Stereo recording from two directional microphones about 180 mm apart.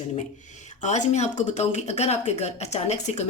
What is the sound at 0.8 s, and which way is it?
Speech, 40° left (ahead or behind).